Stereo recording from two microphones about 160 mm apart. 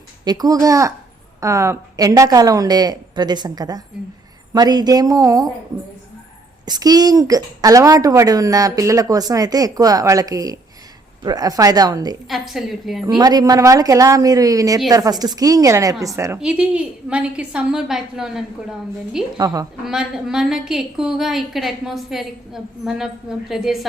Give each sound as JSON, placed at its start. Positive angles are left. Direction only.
{"t": 0.3, "sound": "speech", "side_deg": -25}
{"t": 6.7, "sound": "speech", "side_deg": -25}
{"t": 12.3, "sound": "a woman's voice", "side_deg": 0}
{"t": 13.1, "sound": "speech", "side_deg": -25}
{"t": 16.4, "sound": "a woman's voice", "side_deg": -5}
{"t": 19.4, "sound": "speech", "side_deg": -20}
{"t": 19.8, "sound": "a woman's voice", "side_deg": -5}